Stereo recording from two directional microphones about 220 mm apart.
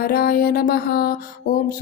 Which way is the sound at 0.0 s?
45° left (ahead or behind).